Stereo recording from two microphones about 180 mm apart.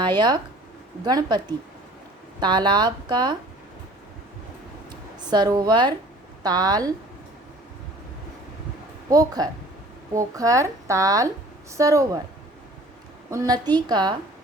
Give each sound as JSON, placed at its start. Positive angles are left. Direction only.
{"t": 0.0, "sound": "speech", "side_deg": -25}
{"t": 2.4, "sound": "speech", "side_deg": -25}
{"t": 4.9, "sound": "a woman's voice", "side_deg": -25}
{"t": 9.0, "sound": "a woman's voice", "side_deg": -20}
{"t": 13.3, "sound": "speech", "side_deg": -20}